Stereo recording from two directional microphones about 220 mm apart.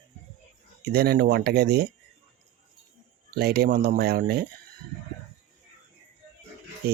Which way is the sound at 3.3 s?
45° right (ahead or behind).